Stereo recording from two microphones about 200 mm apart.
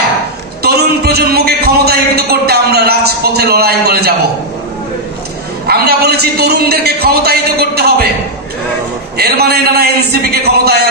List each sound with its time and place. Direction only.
0.6 s a man's voice: 50° right (ahead or behind)
5.7 s a man's voice: 50° right (ahead or behind)
9.1 s a man's voice: 50° right (ahead or behind)